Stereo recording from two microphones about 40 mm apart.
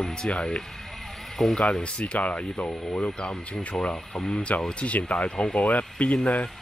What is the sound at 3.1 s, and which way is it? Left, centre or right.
Speech, left.